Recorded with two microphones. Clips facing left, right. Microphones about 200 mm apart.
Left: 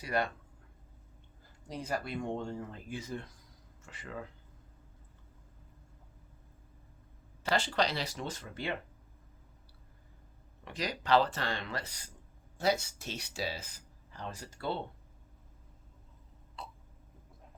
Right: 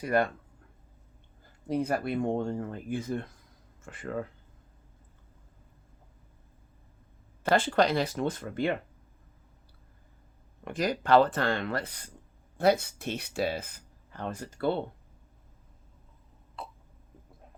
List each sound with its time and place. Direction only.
0.0 s speech: 50° right (ahead or behind)
1.6 s speech: 55° right (ahead or behind)
7.4 s speech: 55° right (ahead or behind)
10.6 s speech: 50° right (ahead or behind)
16.6 s hiccup: 55° right (ahead or behind)